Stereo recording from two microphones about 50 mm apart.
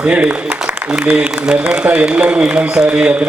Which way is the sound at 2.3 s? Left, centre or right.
Centre.